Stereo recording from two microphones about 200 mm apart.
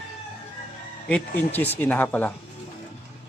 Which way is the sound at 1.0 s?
10° left (ahead or behind).